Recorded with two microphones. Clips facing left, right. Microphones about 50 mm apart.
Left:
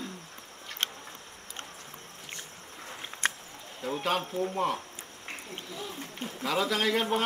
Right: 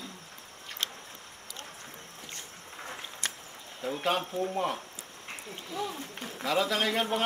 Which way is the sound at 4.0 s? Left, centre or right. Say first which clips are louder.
Even; centre.